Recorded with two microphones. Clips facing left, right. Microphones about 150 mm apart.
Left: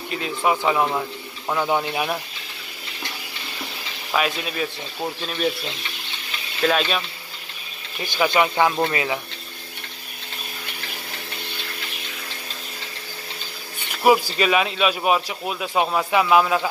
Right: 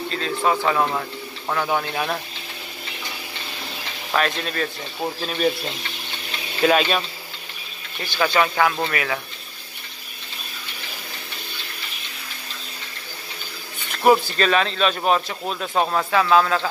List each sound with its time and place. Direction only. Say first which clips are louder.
0.5 s speech: left 1 dB; 15° left (ahead or behind)
4.1 s speech: right 1 dB; 5° left (ahead or behind)
6.6 s speech: right 3 dB; 5° right (ahead or behind)
8.0 s speech: left 1 dB; 15° left (ahead or behind)
13.9 s speech: right 1 dB; 5° left (ahead or behind)